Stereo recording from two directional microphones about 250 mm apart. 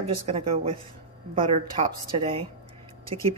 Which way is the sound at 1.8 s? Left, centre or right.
Right.